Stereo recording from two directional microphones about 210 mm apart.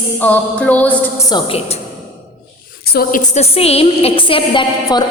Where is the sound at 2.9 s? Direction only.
45° left (ahead or behind).